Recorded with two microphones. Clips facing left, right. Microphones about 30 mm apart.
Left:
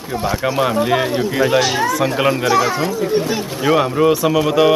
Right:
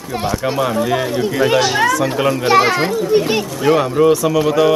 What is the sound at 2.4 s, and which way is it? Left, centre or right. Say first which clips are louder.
Speech: right 3 dB; right.